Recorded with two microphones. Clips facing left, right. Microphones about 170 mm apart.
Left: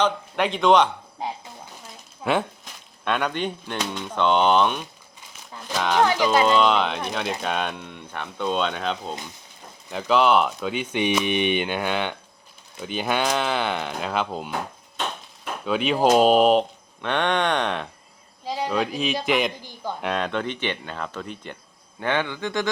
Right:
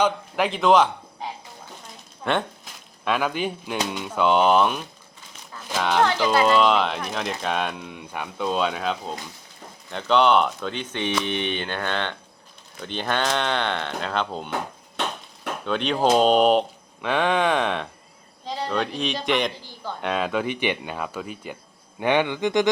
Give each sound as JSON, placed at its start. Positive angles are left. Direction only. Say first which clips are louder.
{"t": 0.0, "sound": "speech", "louder": "right 1 dB", "side_deg": 0}
{"t": 2.2, "sound": "speech", "louder": "left 1 dB", "side_deg": 5}
{"t": 6.1, "sound": "speech", "louder": "left 1 dB", "side_deg": 15}
{"t": 6.4, "sound": "speech", "louder": "even", "side_deg": 0}
{"t": 15.6, "sound": "speech", "louder": "left 2 dB", "side_deg": 5}
{"t": 18.4, "sound": "speech", "louder": "left 1 dB", "side_deg": 10}